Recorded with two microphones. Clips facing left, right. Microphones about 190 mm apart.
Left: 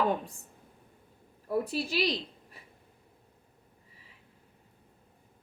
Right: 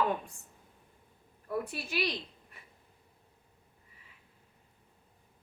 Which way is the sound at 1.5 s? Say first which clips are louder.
Left 5 dB; 30° left (ahead or behind).